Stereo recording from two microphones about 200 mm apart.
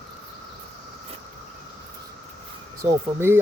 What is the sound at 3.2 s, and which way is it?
Speech, 10° right (ahead or behind).